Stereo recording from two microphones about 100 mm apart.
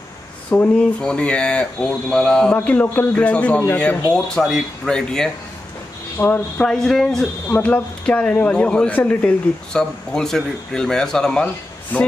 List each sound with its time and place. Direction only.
0.5 s speech: 10° left (ahead or behind)
2.5 s speech: 15° left (ahead or behind)
4.4 s speech: 5° left (ahead or behind)
6.1 s speech: 20° left (ahead or behind)
6.6 s speech: 5° left (ahead or behind)